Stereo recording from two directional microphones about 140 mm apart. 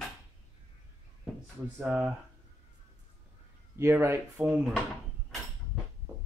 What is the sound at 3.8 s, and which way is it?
Speech, 15° right (ahead or behind).